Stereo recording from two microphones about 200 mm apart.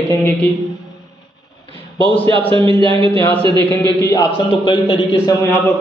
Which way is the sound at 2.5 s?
25° right (ahead or behind).